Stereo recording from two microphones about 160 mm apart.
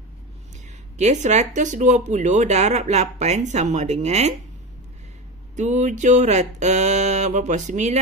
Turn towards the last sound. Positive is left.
turn(degrees=-45)  # may be behind; listen again after turning